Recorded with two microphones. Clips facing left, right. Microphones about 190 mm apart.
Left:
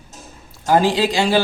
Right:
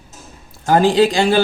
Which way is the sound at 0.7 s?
50° right (ahead or behind).